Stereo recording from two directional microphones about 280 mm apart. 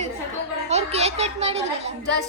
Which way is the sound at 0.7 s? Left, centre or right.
Right.